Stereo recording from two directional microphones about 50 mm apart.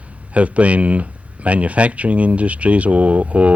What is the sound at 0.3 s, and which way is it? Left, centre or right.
Speech, right.